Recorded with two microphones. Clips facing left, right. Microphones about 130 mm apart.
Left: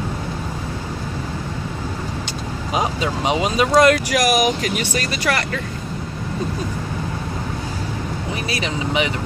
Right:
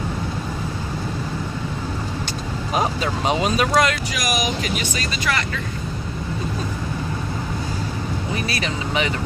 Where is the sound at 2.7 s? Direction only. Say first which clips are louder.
Left 1 dB; 15° left (ahead or behind).